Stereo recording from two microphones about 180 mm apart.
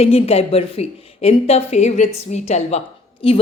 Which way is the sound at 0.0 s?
35° left (ahead or behind).